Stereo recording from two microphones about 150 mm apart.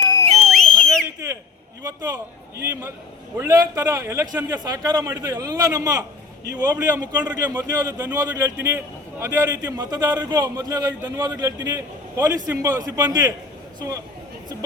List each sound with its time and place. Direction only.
0.4 s a sound: centre (ahead or behind)
1.8 s a man's voice: 25° right (ahead or behind)
3.3 s a man's voice: 20° right (ahead or behind)